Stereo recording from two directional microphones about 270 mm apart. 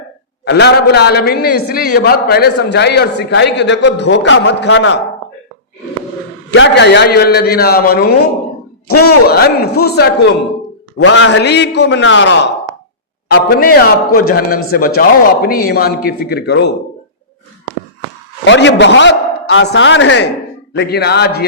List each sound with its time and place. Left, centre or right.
0.4 s a man's voice: left
6.5 s a man's voice: left
9.2 s a man's voice: left
18.4 s a man's voice: left